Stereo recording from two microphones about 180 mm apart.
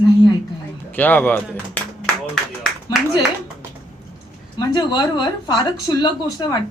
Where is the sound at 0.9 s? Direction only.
10° left (ahead or behind).